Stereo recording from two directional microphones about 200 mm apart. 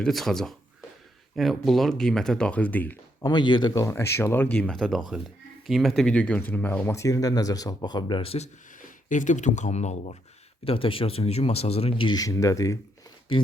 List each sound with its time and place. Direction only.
0.0 s speech: centre (ahead or behind)
3.2 s speech: 20° left (ahead or behind)
9.0 s speech: 40° left (ahead or behind); by 12.8 s 15° left (ahead or behind)